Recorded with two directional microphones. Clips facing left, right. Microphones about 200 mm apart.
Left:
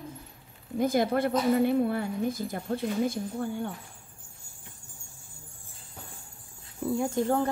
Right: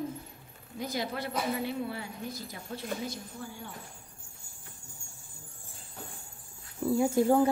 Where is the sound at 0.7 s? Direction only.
50° left (ahead or behind).